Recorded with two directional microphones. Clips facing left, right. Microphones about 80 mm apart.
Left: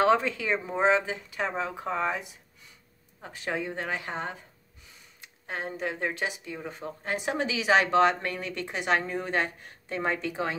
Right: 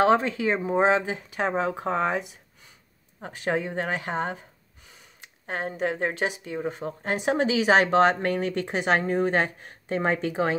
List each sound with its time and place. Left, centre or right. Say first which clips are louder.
0.0 s speech: right 3 dB; right
5.9 s speech: right 4 dB; right
6.5 s speech: right 7 dB; right